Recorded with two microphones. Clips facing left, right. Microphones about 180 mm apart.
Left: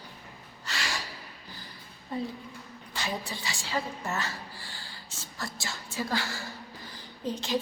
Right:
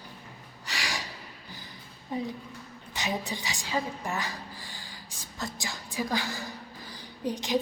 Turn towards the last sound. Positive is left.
turn(degrees=-15)  # may be behind; listen again after turning